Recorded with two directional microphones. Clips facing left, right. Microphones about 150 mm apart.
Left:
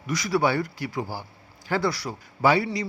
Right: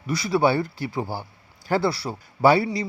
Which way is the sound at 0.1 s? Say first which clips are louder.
Right 3 dB; 25° right (ahead or behind).